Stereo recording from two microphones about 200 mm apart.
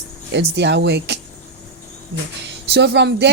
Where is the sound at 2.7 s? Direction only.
60° right (ahead or behind).